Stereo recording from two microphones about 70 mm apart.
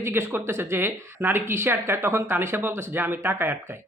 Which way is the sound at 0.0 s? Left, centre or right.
Right.